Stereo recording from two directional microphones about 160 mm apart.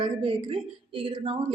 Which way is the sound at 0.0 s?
35° right (ahead or behind).